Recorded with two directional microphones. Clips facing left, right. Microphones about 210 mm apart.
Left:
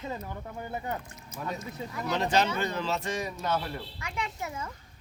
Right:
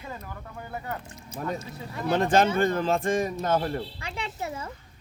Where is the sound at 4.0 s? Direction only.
30° right (ahead or behind).